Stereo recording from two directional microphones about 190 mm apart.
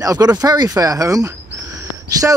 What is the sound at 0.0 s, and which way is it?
Speech, 20° right (ahead or behind).